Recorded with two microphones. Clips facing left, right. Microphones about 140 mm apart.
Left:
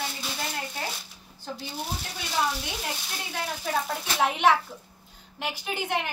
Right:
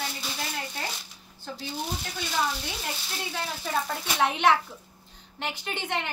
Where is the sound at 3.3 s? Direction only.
Centre (ahead or behind).